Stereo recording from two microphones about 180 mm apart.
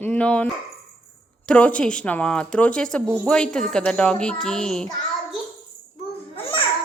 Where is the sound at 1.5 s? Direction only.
5° left (ahead or behind).